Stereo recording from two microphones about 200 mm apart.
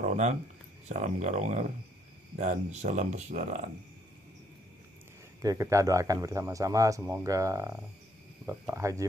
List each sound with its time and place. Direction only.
0.0 s a sound: 35° right (ahead or behind)
0.8 s speech: 35° right (ahead or behind)
5.4 s speech: 15° right (ahead or behind)